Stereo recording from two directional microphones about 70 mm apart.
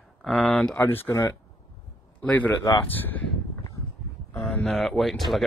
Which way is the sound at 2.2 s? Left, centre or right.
Left.